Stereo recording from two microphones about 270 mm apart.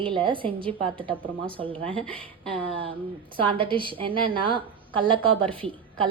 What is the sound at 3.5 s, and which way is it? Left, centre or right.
A woman's voice, centre.